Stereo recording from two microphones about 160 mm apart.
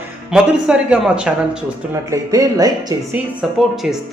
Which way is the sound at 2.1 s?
20° right (ahead or behind).